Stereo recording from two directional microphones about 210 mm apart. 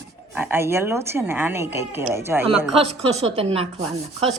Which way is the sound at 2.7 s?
30° right (ahead or behind).